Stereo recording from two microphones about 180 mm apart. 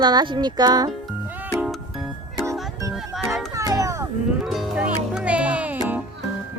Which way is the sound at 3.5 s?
20° right (ahead or behind).